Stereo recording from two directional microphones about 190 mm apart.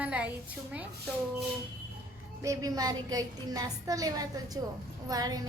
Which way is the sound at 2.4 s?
15° right (ahead or behind).